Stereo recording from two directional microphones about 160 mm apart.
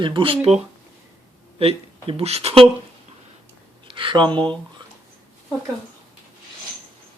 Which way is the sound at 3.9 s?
30° right (ahead or behind).